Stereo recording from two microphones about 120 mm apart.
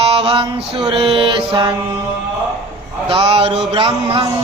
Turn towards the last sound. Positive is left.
turn(degrees=-40)  # may be behind; listen again after turning